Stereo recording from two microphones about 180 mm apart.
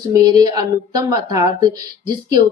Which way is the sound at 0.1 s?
20° right (ahead or behind).